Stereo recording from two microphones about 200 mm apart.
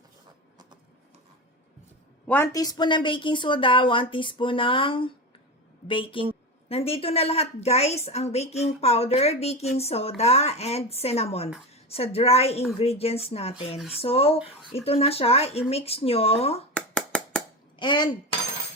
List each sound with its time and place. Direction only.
2.2 s a woman's voice: 10° left (ahead or behind); by 16.6 s 30° left (ahead or behind)
16.7 s a sound: 5° left (ahead or behind)
17.7 s speech: 25° left (ahead or behind)